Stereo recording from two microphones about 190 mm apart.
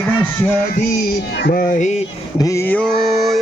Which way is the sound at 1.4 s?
50° left (ahead or behind).